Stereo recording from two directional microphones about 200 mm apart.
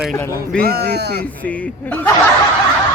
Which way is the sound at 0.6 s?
55° right (ahead or behind).